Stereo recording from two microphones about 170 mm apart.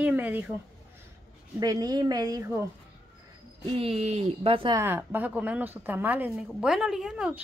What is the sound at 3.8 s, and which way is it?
Speech, 35° right (ahead or behind).